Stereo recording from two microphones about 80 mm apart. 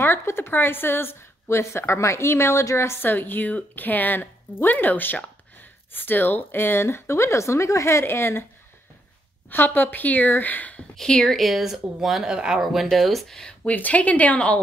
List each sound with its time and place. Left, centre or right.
0.0 s a woman's voice: left
9.5 s a woman's voice: left
11.0 s speech: centre
13.5 s speech: centre